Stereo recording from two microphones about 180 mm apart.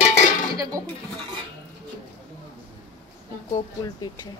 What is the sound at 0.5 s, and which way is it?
Speech, 20° right (ahead or behind).